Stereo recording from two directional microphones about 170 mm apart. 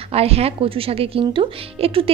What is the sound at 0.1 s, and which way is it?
Speech, 35° right (ahead or behind).